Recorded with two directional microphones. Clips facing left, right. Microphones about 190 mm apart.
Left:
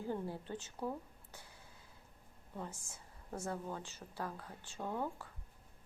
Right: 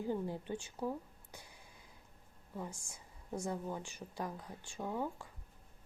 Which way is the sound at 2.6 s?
10° right (ahead or behind).